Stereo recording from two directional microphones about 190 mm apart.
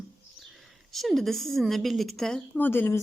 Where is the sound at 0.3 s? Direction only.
Centre (ahead or behind).